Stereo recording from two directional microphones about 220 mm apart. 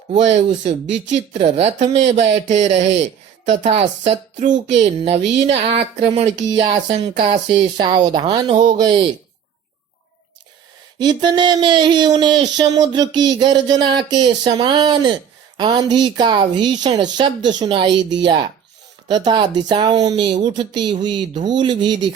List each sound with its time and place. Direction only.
0.1 s speech: 30° right (ahead or behind)
11.0 s speech: 20° right (ahead or behind)